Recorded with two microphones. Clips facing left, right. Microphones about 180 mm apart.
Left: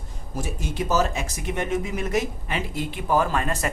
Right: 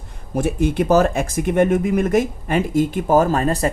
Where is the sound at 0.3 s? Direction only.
60° right (ahead or behind).